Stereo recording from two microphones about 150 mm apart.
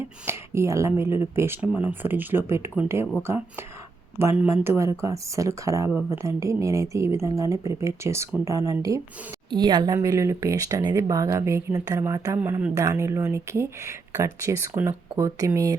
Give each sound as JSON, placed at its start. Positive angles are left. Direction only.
{"t": 0.0, "sound": "speech", "side_deg": -15}
{"t": 4.2, "sound": "speech", "side_deg": -15}